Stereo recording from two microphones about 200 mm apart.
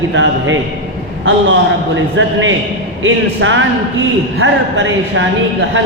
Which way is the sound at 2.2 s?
70° right (ahead or behind).